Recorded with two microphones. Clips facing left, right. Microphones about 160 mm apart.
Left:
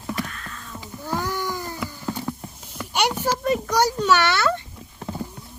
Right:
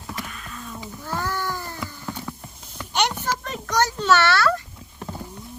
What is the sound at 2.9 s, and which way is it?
A child's voice, 10° left (ahead or behind).